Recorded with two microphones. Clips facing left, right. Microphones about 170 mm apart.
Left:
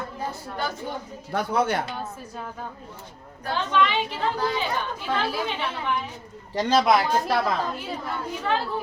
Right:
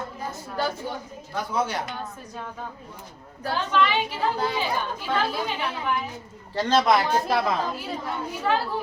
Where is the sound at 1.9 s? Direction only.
5° left (ahead or behind).